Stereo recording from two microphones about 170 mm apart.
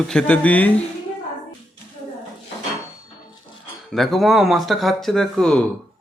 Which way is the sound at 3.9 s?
Centre (ahead or behind).